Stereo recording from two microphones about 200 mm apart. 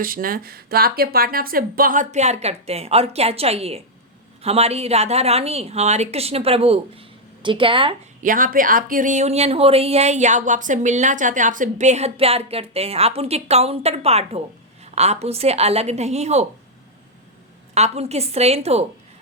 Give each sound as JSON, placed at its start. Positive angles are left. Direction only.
{"t": 0.0, "sound": "speech", "side_deg": -45}
{"t": 8.2, "sound": "speech", "side_deg": -40}
{"t": 17.7, "sound": "speech", "side_deg": -30}